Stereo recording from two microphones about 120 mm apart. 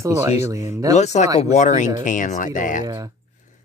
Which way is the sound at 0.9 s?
70° left (ahead or behind).